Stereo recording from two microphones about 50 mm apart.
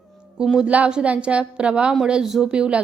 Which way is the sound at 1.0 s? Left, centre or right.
Right.